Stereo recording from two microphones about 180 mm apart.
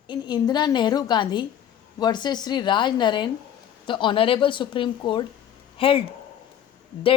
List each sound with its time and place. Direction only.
0.1 s a woman's voice: 25° left (ahead or behind)